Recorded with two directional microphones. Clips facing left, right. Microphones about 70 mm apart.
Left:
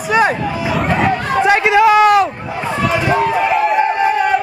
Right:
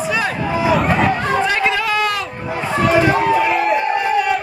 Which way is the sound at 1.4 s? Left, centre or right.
Left.